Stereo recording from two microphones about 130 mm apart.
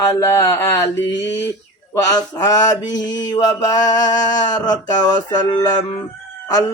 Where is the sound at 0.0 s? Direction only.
25° left (ahead or behind).